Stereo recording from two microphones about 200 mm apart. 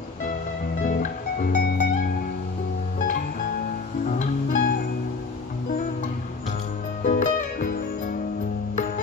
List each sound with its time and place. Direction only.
0.8 s music: 40° left (ahead or behind)
4.1 s music: 40° left (ahead or behind)
7.0 s music: 40° left (ahead or behind)